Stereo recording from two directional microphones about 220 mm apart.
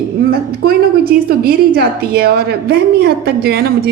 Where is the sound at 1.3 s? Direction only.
45° right (ahead or behind).